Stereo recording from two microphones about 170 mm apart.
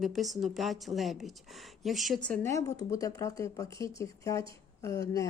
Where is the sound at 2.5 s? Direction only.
20° left (ahead or behind).